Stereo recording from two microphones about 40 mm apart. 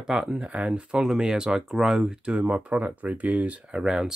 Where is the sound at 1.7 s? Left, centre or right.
Centre.